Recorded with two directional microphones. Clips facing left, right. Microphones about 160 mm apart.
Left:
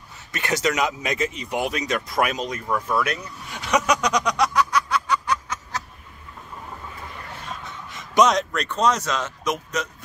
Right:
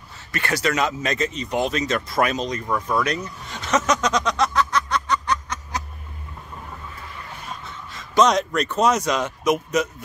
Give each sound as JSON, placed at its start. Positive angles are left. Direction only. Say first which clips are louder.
{"t": 0.3, "sound": "speech", "louder": "even", "side_deg": 20}
{"t": 7.9, "sound": "a sound", "louder": "even", "side_deg": 20}
{"t": 8.3, "sound": "speech", "louder": "right 2 dB", "side_deg": 0}